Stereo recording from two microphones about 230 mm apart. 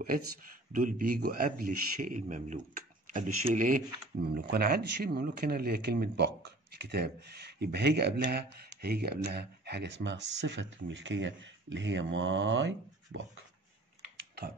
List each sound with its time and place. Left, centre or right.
0.7 s speech: right